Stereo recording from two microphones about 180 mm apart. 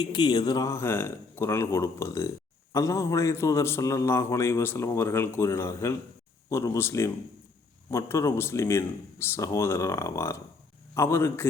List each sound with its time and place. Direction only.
0.0 s a man's voice: 25° left (ahead or behind)